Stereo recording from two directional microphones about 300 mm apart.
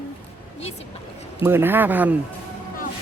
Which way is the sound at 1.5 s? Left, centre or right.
Centre.